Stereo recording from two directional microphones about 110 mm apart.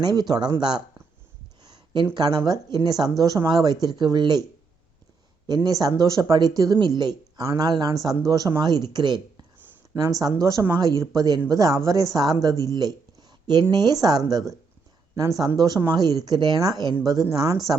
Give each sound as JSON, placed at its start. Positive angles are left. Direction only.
{"t": 0.0, "sound": "speech", "side_deg": -40}
{"t": 1.6, "sound": "a sound", "side_deg": -40}
{"t": 2.1, "sound": "speech", "side_deg": -40}
{"t": 6.0, "sound": "speech", "side_deg": -30}
{"t": 9.9, "sound": "speech", "side_deg": -30}